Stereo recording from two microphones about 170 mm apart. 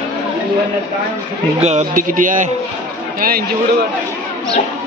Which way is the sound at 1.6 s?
40° right (ahead or behind).